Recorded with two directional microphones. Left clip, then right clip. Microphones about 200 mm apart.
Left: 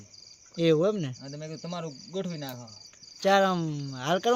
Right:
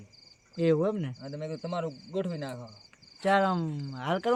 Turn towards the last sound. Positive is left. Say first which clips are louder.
# left 3 dB
turn(degrees=45)  # may be behind; listen again after turning